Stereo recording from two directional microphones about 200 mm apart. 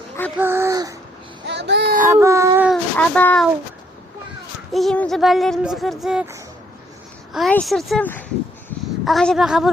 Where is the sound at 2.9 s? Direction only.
5° left (ahead or behind).